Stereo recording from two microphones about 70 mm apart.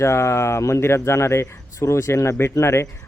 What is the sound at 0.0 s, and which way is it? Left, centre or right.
Speech, left.